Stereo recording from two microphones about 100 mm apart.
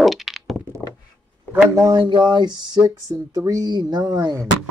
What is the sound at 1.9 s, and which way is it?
Music, 50° right (ahead or behind).